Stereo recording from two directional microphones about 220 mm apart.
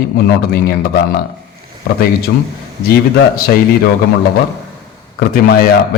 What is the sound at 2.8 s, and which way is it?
Speech, 45° left (ahead or behind).